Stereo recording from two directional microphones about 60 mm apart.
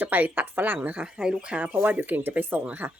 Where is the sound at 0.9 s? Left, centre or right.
Centre.